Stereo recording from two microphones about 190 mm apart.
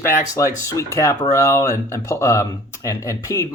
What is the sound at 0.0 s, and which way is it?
Speech, 15° left (ahead or behind).